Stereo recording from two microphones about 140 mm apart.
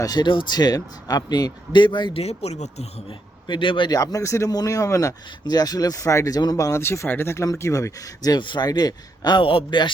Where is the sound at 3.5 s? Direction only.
35° left (ahead or behind).